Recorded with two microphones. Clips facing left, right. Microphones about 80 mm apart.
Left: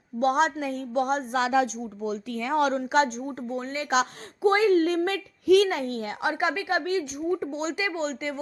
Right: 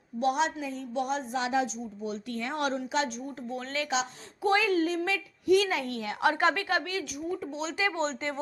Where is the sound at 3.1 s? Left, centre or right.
Left.